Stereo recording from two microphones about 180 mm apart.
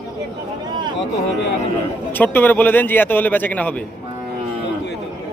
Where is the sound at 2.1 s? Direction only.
10° left (ahead or behind).